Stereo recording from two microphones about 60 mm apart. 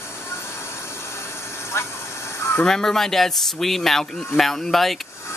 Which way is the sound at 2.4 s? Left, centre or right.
Left.